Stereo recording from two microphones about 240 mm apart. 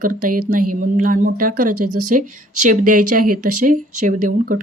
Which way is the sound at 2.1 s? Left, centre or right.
Right.